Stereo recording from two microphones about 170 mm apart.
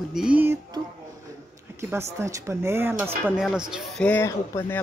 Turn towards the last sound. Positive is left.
turn(degrees=15)  # may be behind; listen again after turning